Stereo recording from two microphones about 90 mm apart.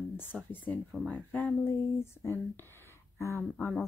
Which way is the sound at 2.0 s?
25° left (ahead or behind).